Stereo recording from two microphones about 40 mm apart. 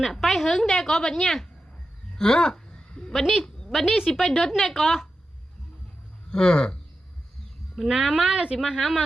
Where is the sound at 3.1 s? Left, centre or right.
Centre.